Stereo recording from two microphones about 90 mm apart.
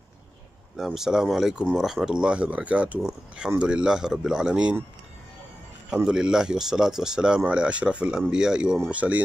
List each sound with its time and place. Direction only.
0.7 s speech: 5° right (ahead or behind)
6.0 s speech: 10° right (ahead or behind)